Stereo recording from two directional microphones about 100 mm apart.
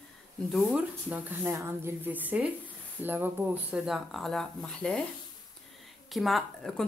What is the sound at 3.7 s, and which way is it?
Speech, 5° right (ahead or behind).